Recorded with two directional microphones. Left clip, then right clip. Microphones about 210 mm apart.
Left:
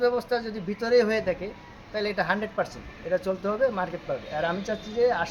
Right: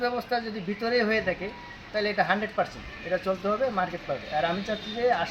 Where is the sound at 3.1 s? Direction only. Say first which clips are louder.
Even; 5° left (ahead or behind).